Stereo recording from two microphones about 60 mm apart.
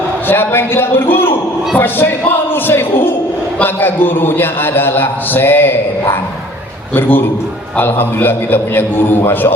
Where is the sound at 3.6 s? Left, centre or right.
Left.